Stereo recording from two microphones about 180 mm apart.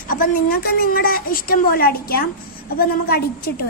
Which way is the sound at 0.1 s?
55° left (ahead or behind).